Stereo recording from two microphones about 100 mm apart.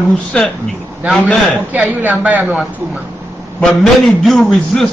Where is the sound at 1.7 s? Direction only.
15° right (ahead or behind).